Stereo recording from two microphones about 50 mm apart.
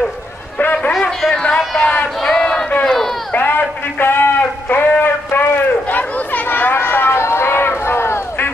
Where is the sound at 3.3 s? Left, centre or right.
Left.